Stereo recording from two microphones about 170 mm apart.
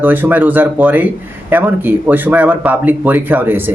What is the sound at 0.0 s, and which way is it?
Speech, 10° right (ahead or behind).